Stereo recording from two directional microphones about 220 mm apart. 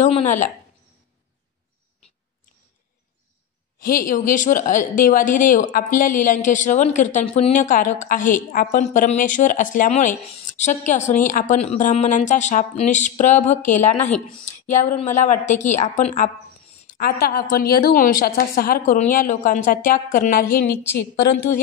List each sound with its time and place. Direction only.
0.0 s a sound: 30° left (ahead or behind)
3.8 s a woman's voice: 40° left (ahead or behind)
16.9 s a woman's voice: 45° left (ahead or behind)